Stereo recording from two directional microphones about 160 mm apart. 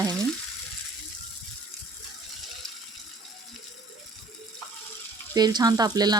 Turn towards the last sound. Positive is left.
turn(degrees=-25)  # may be behind; listen again after turning